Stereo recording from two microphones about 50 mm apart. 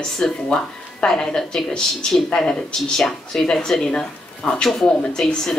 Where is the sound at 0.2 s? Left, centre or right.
Centre.